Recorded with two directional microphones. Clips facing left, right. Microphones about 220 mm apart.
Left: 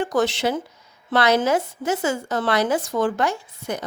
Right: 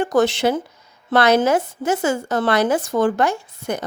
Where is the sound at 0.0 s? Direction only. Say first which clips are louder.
Right 4 dB; 50° right (ahead or behind).